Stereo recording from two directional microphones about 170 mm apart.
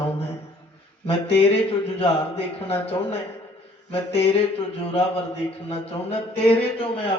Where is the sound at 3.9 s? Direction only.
35° left (ahead or behind).